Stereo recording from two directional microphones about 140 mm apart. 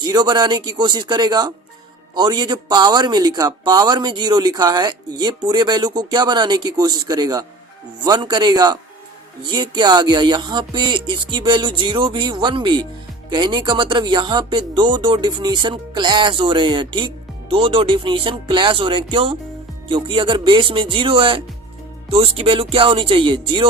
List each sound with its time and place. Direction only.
0.0 s a man's voice: 30° right (ahead or behind)